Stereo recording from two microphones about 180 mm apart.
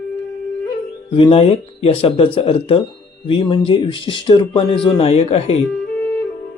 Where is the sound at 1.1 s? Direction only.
30° left (ahead or behind).